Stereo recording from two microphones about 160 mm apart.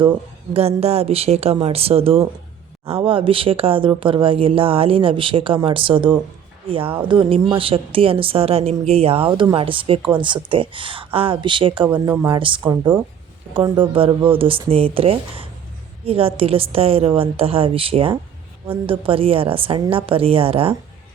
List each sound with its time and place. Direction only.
0.5 s speech: 40° right (ahead or behind)
11.9 s speech: 15° right (ahead or behind)
12.3 s speech: 30° right (ahead or behind)